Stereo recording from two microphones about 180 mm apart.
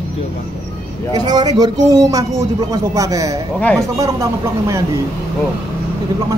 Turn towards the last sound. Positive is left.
turn(degrees=-15)  # may be behind; listen again after turning